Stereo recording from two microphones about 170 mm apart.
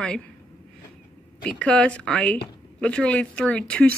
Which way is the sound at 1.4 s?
5° left (ahead or behind).